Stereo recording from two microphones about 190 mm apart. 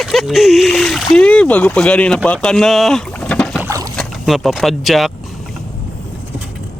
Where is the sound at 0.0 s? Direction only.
Centre (ahead or behind).